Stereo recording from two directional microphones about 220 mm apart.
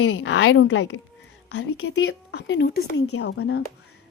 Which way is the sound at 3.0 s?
70° left (ahead or behind).